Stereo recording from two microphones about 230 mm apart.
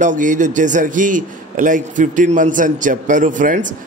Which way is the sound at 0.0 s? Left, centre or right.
Right.